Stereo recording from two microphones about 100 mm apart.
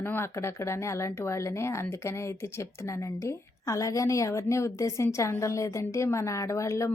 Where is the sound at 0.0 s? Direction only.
20° left (ahead or behind).